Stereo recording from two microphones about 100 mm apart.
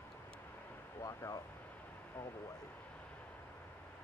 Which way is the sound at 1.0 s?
35° left (ahead or behind).